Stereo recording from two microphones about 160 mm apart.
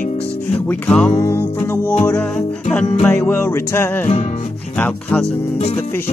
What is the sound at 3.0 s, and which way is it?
Music, 10° left (ahead or behind).